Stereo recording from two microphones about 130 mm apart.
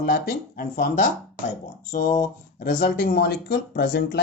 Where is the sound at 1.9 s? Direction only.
75° left (ahead or behind).